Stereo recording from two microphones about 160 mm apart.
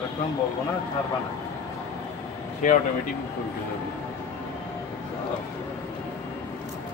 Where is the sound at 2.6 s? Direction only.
55° left (ahead or behind).